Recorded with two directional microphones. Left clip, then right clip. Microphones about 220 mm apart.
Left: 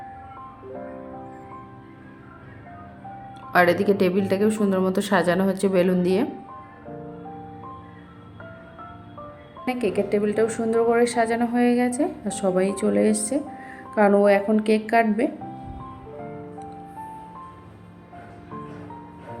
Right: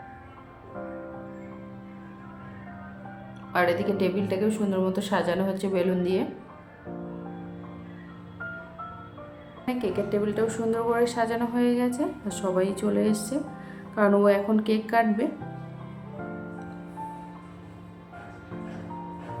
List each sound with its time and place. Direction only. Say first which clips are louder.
3.5 s a woman's voice: left 6 dB; 30° left (ahead or behind)
9.6 s a woman's voice: left 4 dB; 15° left (ahead or behind)